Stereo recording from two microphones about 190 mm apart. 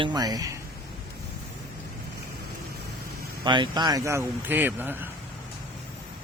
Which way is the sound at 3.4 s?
25° right (ahead or behind).